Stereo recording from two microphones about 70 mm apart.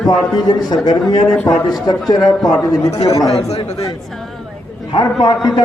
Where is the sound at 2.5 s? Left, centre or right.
Left.